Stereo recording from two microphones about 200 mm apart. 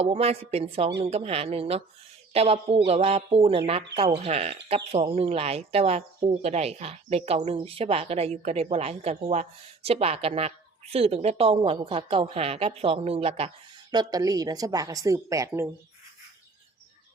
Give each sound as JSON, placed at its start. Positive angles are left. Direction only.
{"t": 0.0, "sound": "a woman's voice", "side_deg": -30}